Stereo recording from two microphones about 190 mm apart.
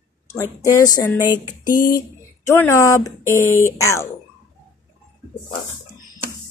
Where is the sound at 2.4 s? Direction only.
15° left (ahead or behind).